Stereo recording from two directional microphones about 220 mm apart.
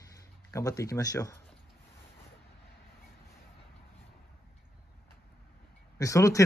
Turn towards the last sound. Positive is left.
turn(degrees=15)  # may be behind; listen again after turning